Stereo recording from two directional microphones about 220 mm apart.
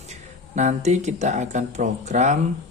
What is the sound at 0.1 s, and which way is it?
Speech, 35° right (ahead or behind).